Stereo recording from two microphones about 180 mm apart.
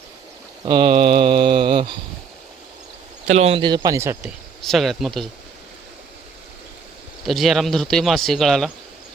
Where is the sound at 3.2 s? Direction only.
35° right (ahead or behind); by 4.3 s 15° right (ahead or behind).